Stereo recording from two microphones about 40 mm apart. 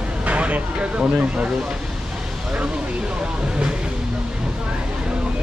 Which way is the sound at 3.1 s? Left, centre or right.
Right.